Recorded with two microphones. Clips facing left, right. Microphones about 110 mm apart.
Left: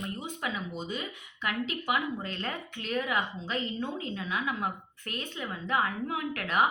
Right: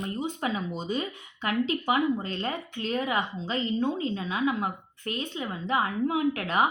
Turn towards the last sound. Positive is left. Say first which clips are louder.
# right 4 dB
turn(degrees=-25)  # may be behind; listen again after turning